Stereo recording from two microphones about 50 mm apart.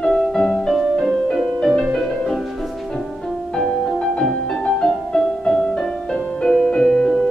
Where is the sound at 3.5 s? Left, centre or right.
Centre.